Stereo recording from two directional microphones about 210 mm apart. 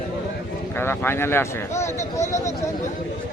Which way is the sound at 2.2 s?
35° left (ahead or behind).